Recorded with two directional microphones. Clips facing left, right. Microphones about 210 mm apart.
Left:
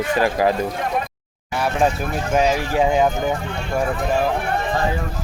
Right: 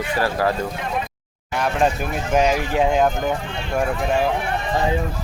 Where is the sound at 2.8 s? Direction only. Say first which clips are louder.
Left 1 dB; 5° left (ahead or behind).